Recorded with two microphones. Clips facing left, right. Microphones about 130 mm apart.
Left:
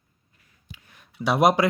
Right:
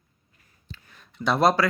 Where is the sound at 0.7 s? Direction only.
10° left (ahead or behind).